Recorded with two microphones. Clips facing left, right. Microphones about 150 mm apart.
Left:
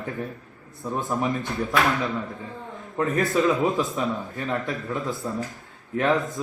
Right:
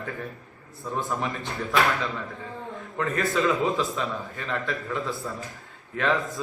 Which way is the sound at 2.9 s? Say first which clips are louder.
Left 3 dB; 20° left (ahead or behind).